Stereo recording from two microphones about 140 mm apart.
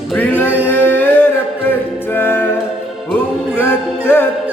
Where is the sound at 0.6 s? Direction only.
15° left (ahead or behind).